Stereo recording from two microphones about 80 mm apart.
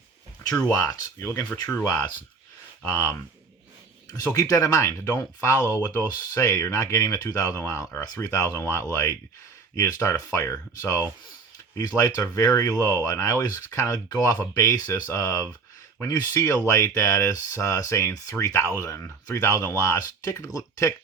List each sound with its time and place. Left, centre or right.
0.6 s speech: left
1.2 s speech: left
1.8 s speech: left
4.3 s speech: left
11.7 s speech: left